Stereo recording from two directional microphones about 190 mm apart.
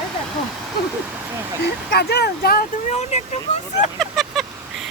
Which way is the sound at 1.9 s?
60° left (ahead or behind).